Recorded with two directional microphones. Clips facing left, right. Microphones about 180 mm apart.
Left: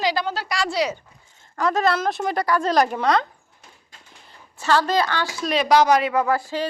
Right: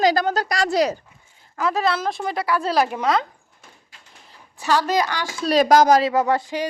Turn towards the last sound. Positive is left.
turn(degrees=-15)  # may be behind; listen again after turning